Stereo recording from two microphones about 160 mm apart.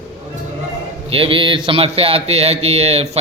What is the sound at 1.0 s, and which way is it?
Speech, 35° right (ahead or behind).